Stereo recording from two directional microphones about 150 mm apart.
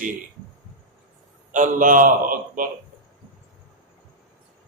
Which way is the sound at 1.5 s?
60° right (ahead or behind).